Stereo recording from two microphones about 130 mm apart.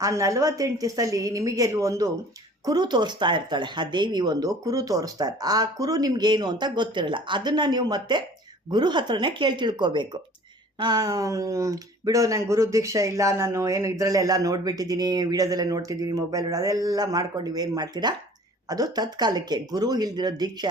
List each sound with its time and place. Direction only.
0.0 s speech: 25° right (ahead or behind)